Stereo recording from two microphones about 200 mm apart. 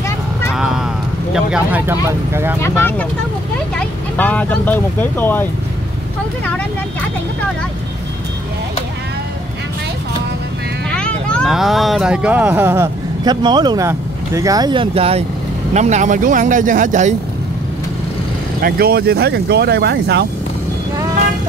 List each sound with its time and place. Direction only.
0.5 s music: 5° right (ahead or behind)
1.3 s speech: 5° right (ahead or behind)
2.6 s speech: 10° left (ahead or behind)
10.9 s speech: 5° left (ahead or behind); by 17.1 s 40° right (ahead or behind)
18.6 s speech: 50° right (ahead or behind)